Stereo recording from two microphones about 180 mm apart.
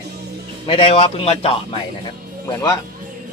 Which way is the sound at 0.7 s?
30° left (ahead or behind).